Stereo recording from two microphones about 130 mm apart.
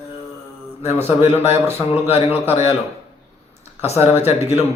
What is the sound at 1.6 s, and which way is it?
Speech, 20° right (ahead or behind).